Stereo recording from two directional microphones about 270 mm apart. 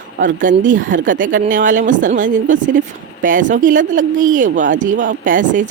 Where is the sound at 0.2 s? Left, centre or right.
Right.